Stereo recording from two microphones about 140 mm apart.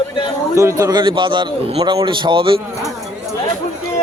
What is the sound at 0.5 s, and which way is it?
A man's voice, 20° right (ahead or behind).